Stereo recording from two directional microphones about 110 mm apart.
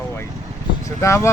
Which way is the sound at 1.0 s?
25° left (ahead or behind).